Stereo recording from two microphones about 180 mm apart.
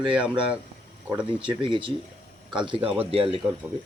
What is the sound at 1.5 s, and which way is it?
Speech, 30° right (ahead or behind).